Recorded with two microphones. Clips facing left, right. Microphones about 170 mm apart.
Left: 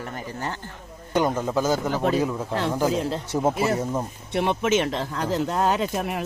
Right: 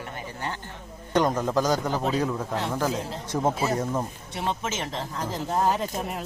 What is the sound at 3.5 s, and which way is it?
Speech, 65° left (ahead or behind).